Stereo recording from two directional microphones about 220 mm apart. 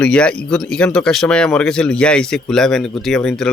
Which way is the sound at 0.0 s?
5° left (ahead or behind).